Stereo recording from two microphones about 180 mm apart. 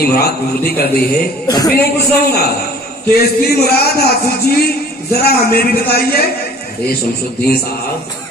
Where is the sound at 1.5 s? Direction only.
20° left (ahead or behind).